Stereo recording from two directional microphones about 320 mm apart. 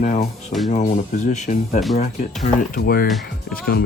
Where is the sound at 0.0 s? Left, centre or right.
Left.